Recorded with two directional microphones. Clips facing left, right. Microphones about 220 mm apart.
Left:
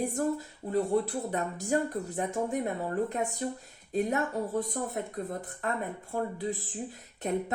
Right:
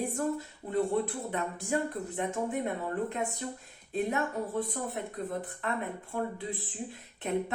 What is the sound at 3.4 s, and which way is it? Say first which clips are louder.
Speech: left 5 dB; 35° left (ahead or behind).